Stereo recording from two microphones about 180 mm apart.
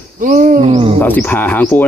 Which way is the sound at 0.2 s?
50° right (ahead or behind).